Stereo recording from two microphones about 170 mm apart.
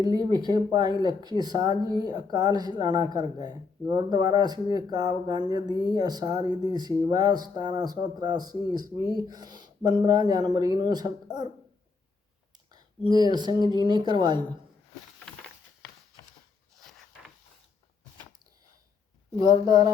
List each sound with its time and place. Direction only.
0.0 s speech: 25° right (ahead or behind)
12.7 s speech: 25° right (ahead or behind)
16.8 s a sound: centre (ahead or behind)
19.4 s speech: 25° right (ahead or behind)